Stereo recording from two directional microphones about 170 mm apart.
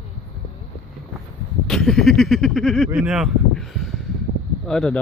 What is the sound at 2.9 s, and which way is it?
Speech, centre (ahead or behind).